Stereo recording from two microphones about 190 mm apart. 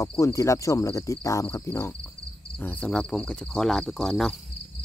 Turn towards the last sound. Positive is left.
turn(degrees=0)  # may be behind; listen again after turning